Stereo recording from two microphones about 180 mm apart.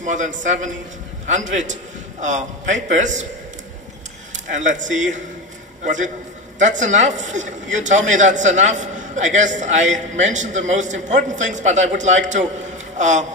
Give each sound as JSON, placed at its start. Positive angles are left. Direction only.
{"t": 0.0, "sound": "a man's voice", "side_deg": -45}
{"t": 4.6, "sound": "a man's voice", "side_deg": -45}
{"t": 6.6, "sound": "a man's voice", "side_deg": -45}